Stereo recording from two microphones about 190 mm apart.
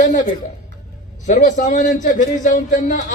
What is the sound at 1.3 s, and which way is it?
A man's voice, 40° left (ahead or behind).